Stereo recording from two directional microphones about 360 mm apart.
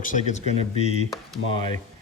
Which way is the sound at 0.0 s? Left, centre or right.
Left.